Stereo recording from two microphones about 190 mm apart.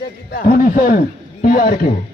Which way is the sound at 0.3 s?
50° left (ahead or behind).